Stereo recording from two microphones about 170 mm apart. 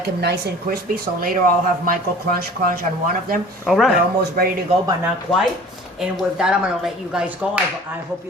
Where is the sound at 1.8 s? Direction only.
55° right (ahead or behind).